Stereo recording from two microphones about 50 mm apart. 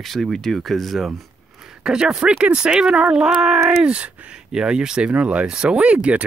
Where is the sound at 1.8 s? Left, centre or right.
Centre.